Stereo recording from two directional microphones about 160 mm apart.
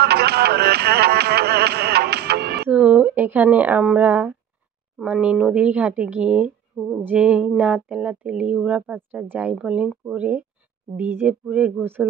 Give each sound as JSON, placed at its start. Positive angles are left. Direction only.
{"t": 0.0, "sound": "music", "side_deg": -90}
{"t": 2.7, "sound": "speech", "side_deg": -5}